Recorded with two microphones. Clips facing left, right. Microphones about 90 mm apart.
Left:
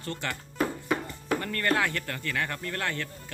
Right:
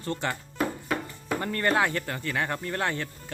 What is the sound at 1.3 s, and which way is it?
Speech, 20° right (ahead or behind).